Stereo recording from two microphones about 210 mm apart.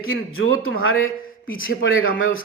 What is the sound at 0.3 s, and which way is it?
A man's voice, 75° left (ahead or behind).